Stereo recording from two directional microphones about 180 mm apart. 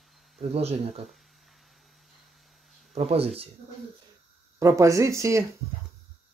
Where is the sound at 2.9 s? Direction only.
35° right (ahead or behind).